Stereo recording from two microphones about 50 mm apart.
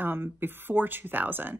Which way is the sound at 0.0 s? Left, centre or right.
Right.